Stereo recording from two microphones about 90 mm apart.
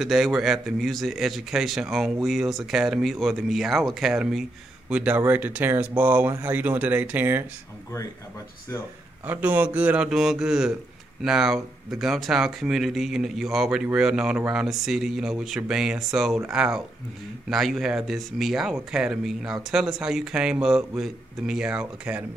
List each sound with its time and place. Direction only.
0.0 s a man's voice: 5° right (ahead or behind); by 7.4 s 20° right (ahead or behind)
9.2 s a man's voice: 20° right (ahead or behind)